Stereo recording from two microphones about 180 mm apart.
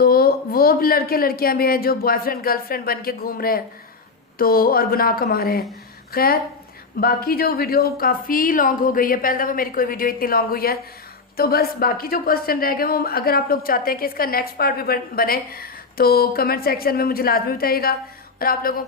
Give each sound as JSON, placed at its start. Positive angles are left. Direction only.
{"t": 0.0, "sound": "a woman's voice", "side_deg": 55}